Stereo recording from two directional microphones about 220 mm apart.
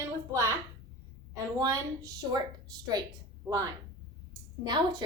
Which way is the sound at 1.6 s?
15° right (ahead or behind).